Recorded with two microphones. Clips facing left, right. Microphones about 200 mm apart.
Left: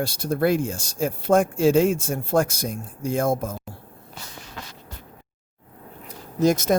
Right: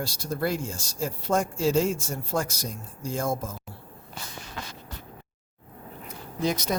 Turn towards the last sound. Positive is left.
turn(degrees=50)  # may be behind; listen again after turning